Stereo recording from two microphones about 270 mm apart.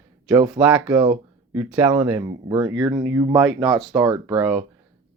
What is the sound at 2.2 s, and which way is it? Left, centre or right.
Speech, centre.